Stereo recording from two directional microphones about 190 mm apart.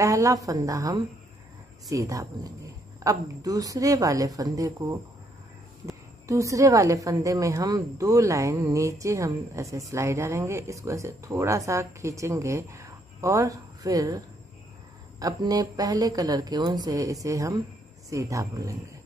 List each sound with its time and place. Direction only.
0.0 s a woman's voice: 15° right (ahead or behind)
6.2 s a woman's voice: 15° right (ahead or behind)